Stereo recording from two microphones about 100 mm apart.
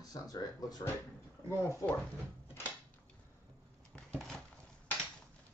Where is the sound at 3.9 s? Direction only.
10° left (ahead or behind).